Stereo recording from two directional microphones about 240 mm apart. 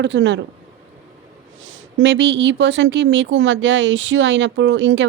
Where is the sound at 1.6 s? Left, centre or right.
Right.